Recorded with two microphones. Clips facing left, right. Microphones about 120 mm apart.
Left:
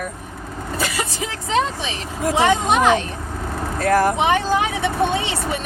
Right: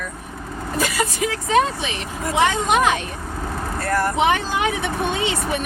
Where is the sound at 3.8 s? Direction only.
90° left.